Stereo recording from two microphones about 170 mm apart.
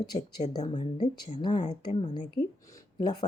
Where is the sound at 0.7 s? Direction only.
25° left (ahead or behind).